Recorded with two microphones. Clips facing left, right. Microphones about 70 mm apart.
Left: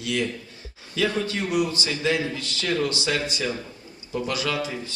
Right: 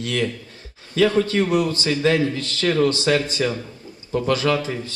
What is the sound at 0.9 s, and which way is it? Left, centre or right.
A man's voice, right.